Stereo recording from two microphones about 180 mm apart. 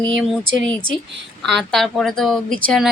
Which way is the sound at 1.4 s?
Centre (ahead or behind).